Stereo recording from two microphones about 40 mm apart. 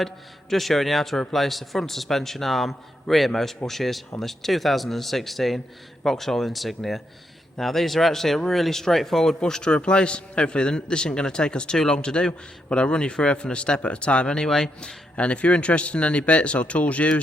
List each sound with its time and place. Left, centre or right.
0.5 s speech: centre; by 17.2 s left